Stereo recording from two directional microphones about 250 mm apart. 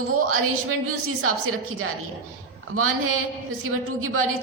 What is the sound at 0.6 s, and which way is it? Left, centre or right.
Speech, right.